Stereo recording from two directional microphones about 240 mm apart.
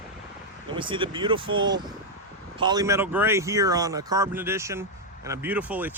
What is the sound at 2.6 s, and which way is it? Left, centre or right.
Speech, centre.